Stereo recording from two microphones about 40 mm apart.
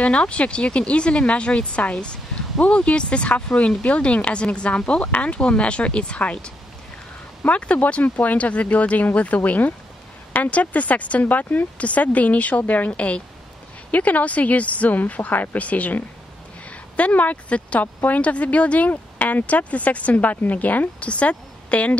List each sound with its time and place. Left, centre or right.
0.0 s speech: left
12.9 s speech: left